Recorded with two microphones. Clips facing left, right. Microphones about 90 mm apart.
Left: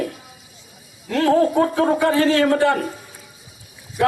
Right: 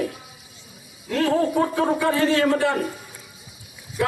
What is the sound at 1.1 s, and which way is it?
Speech, 65° left (ahead or behind).